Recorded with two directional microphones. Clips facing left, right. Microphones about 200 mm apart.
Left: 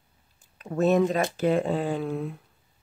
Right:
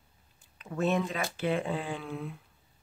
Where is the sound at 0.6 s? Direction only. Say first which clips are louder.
Left 7 dB; 40° left (ahead or behind).